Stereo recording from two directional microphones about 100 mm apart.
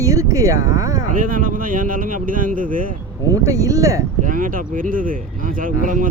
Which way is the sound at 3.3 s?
35° right (ahead or behind).